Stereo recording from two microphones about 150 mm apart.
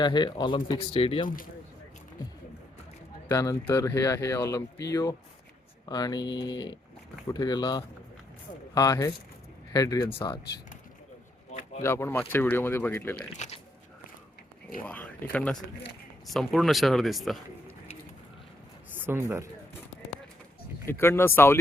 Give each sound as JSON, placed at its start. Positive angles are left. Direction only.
{"t": 0.0, "sound": "speech", "side_deg": 30}
{"t": 3.2, "sound": "speech", "side_deg": 20}
{"t": 11.8, "sound": "speech", "side_deg": 15}
{"t": 13.3, "sound": "speech", "side_deg": 50}
{"t": 14.8, "sound": "speech", "side_deg": 10}
{"t": 18.9, "sound": "speech", "side_deg": -15}
{"t": 20.8, "sound": "speech", "side_deg": 15}